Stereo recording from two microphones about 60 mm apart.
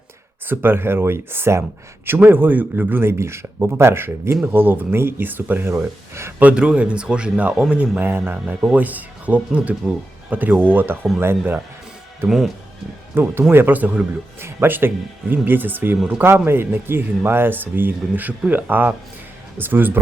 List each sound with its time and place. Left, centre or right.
0.4 s speech: right
2.0 s speech: right
6.4 s speech: centre; by 11.6 s right
13.2 s speech: right
14.3 s speech: right